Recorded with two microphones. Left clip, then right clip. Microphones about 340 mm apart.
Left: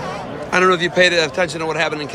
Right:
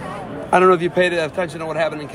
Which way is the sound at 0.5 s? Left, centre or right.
Centre.